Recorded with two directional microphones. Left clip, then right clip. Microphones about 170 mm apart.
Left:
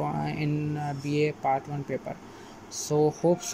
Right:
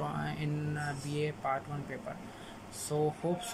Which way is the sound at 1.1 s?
25° left (ahead or behind).